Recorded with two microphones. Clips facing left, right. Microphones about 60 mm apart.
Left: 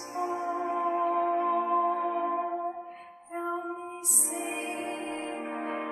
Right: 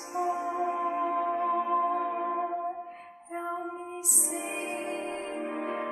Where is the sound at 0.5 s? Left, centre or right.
Left.